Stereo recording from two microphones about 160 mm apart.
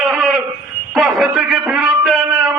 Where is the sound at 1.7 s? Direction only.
5° right (ahead or behind).